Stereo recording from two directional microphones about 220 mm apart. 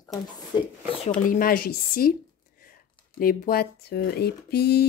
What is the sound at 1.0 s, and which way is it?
Speech, 40° left (ahead or behind).